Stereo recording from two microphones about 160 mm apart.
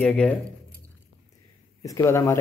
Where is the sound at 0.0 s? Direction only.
5° left (ahead or behind).